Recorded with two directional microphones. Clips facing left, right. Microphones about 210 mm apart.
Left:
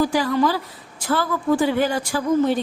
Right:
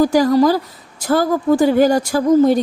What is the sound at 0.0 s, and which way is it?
A woman's voice, 40° right (ahead or behind).